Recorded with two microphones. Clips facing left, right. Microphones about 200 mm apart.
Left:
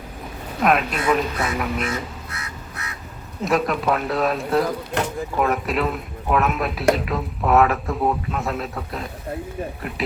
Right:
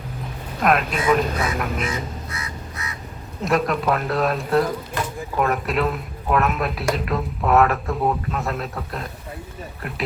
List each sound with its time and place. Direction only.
0.6 s speech: centre (ahead or behind)
2.3 s crow: 65° left (ahead or behind)
3.4 s speech: centre (ahead or behind)